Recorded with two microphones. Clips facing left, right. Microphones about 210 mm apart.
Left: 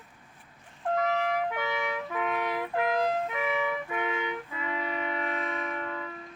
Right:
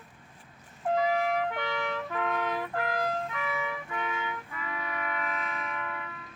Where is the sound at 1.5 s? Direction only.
10° left (ahead or behind); by 6.1 s 30° left (ahead or behind).